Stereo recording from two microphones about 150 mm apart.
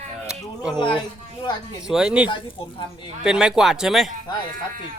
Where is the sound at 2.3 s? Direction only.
35° left (ahead or behind).